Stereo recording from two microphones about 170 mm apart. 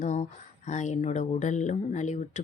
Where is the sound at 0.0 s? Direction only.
45° left (ahead or behind).